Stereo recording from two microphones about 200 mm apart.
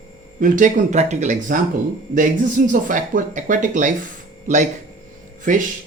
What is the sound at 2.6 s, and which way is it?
Speech, 40° right (ahead or behind).